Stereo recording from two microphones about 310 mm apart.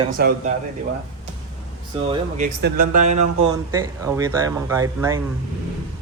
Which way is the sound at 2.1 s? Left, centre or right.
Right.